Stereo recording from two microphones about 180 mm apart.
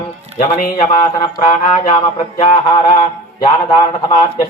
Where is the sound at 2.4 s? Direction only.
30° left (ahead or behind).